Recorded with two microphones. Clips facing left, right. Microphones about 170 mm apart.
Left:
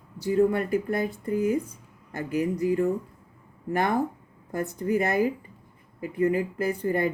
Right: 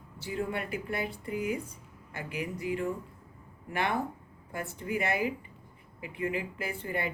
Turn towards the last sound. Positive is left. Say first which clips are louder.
# left 9 dB
turn(degrees=40)  # may be behind; listen again after turning